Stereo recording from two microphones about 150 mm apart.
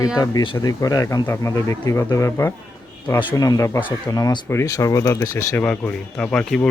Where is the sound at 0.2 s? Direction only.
25° left (ahead or behind).